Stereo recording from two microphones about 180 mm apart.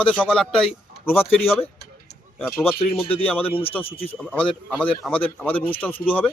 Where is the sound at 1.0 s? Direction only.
10° left (ahead or behind).